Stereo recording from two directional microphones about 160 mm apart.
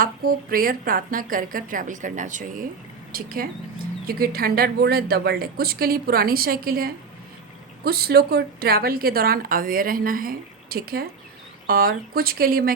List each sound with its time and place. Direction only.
0.0 s a woman's voice: 60° right (ahead or behind)
3.1 s a woman's voice: 65° right (ahead or behind)